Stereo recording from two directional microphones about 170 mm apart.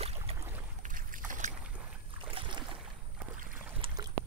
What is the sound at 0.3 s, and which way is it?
Boat, 35° right (ahead or behind).